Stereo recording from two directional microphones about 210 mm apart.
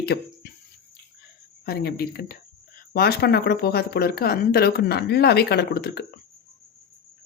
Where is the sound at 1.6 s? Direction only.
50° left (ahead or behind).